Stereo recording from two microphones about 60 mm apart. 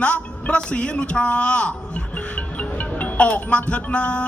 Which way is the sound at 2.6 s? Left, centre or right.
Left.